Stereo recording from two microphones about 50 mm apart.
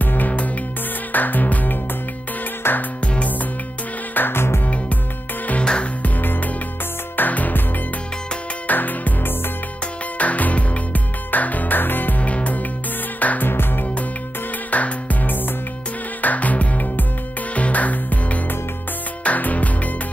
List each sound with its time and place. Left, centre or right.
0.0 s music: left
2.6 s music: left
4.1 s music: left
5.6 s music: left
7.2 s music: left
8.6 s music: left
13.5 s music: left
14.7 s music: left